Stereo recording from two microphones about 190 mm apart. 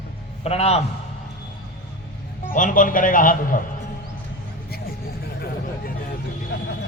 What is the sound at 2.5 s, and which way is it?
A man's voice, 45° left (ahead or behind).